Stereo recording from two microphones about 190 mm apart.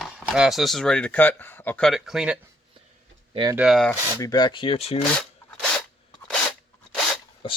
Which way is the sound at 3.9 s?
15° left (ahead or behind).